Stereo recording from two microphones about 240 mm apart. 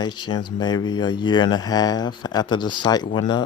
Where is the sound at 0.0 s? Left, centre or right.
Centre.